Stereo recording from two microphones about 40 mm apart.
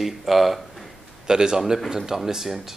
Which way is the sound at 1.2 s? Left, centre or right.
Centre.